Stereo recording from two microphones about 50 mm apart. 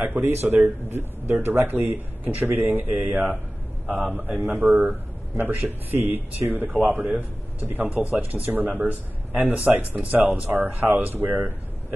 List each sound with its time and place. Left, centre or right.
0.0 s speech: right
0.4 s a man's voice: right
3.0 s speech: right
4.1 s a man's voice: right
7.9 s speech: right
11.1 s a man's voice: right